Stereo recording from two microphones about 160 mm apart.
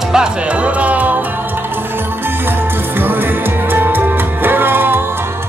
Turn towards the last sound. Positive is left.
turn(degrees=-15)  # may be behind; listen again after turning